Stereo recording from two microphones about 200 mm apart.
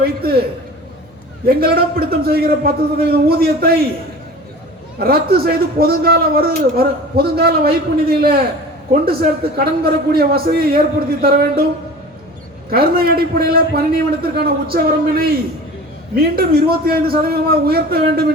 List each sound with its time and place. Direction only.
0.0 s a man's voice: 50° right (ahead or behind)
1.5 s a man's voice: 50° right (ahead or behind)
4.9 s a man's voice: 50° right (ahead or behind)
12.7 s a man's voice: 50° right (ahead or behind)